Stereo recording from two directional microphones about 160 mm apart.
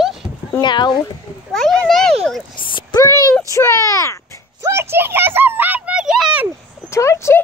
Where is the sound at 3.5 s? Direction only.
20° left (ahead or behind).